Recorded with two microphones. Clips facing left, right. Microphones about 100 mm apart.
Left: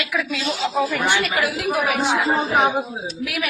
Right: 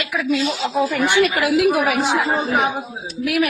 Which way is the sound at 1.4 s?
90° right.